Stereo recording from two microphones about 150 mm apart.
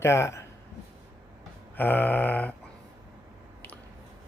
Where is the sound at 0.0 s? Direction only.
20° left (ahead or behind).